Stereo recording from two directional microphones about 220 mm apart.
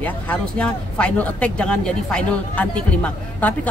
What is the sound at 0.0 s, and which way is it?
Speech, 5° left (ahead or behind).